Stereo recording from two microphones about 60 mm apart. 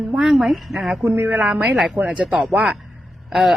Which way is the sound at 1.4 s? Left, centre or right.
Right.